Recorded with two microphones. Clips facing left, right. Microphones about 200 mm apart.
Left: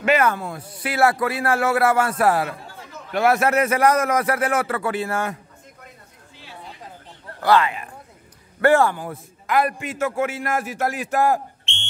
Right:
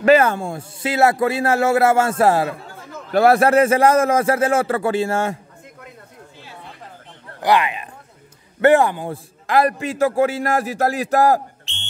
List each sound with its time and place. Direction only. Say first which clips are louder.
0.0 s speech: right 5 dB; 30° right (ahead or behind)
7.3 s a man's voice: even; 15° right (ahead or behind); by 11.9 s 35° right (ahead or behind)